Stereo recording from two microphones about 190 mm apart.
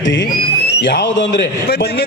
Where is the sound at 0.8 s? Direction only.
70° left (ahead or behind).